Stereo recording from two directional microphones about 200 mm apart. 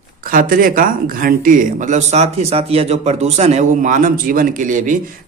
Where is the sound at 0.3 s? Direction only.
45° right (ahead or behind).